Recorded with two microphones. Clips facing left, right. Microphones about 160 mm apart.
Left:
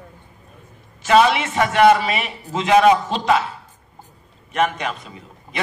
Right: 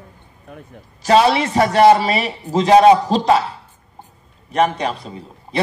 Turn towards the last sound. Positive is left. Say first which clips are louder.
# right 4 dB
turn(degrees=-35)  # may be behind; listen again after turning